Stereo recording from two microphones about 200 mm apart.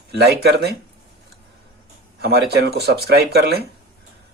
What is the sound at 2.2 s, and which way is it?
Speech, 50° right (ahead or behind).